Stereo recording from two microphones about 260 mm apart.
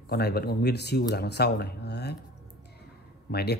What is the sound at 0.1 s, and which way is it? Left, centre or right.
Speech, left.